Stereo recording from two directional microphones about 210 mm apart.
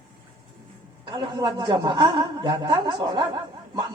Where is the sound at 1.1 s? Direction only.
20° right (ahead or behind).